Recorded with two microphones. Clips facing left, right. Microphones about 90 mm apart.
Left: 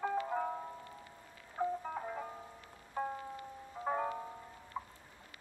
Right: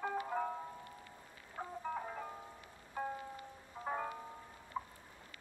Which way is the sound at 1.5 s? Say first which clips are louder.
Left 5 dB; 5° left (ahead or behind).